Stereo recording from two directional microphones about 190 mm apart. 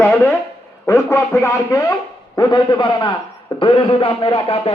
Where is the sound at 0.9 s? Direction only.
15° left (ahead or behind).